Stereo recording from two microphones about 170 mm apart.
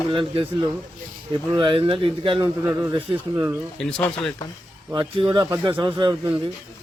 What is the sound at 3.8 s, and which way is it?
Speech, 5° left (ahead or behind).